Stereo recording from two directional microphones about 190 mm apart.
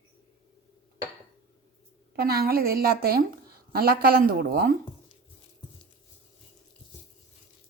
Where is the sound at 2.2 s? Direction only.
55° right (ahead or behind).